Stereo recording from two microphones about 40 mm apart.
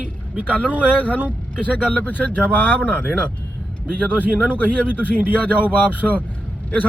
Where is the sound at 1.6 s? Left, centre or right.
Left.